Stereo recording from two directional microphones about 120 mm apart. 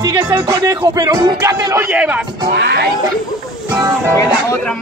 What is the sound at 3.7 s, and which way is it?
Speech, 20° right (ahead or behind).